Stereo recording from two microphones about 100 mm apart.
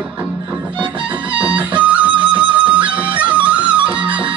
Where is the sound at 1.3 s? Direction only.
10° right (ahead or behind).